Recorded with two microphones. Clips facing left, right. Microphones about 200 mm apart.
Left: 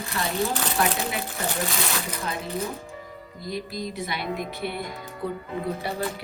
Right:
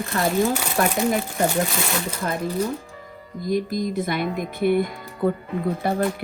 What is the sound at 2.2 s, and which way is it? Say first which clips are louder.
Speech: right 7 dB; 50° right (ahead or behind).